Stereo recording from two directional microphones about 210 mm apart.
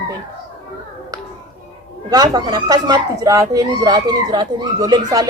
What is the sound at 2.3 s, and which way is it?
Speech, 20° right (ahead or behind).